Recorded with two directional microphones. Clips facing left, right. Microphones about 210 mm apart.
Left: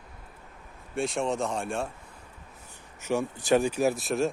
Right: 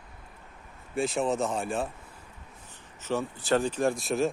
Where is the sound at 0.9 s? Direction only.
Centre (ahead or behind).